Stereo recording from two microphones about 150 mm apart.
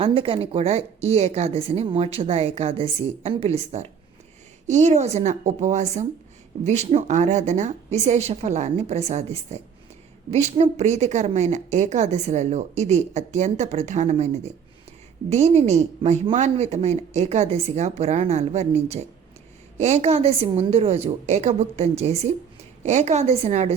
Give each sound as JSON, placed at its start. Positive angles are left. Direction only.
{"t": 0.0, "sound": "a woman's voice", "side_deg": -35}